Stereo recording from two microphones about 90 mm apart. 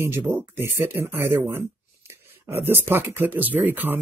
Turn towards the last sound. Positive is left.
turn(degrees=-20)  # may be behind; listen again after turning